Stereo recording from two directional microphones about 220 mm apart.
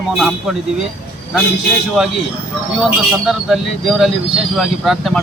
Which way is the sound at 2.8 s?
Centre (ahead or behind).